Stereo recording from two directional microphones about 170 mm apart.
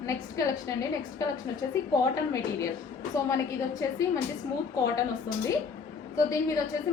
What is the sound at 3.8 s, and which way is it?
Speech, 15° left (ahead or behind).